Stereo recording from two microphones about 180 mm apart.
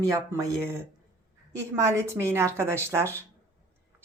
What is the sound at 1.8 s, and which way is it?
Speech, 15° right (ahead or behind).